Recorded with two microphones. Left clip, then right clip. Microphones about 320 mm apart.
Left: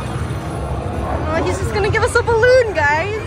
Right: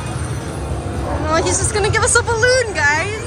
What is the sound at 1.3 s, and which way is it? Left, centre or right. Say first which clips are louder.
A woman's voice: right 4 dB; centre.